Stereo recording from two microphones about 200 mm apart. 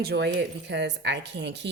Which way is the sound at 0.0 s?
55° right (ahead or behind).